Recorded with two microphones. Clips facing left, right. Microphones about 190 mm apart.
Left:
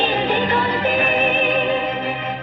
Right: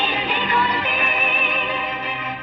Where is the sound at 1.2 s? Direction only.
25° left (ahead or behind).